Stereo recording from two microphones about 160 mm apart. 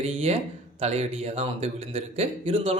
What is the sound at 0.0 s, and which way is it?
A man's voice, 40° right (ahead or behind).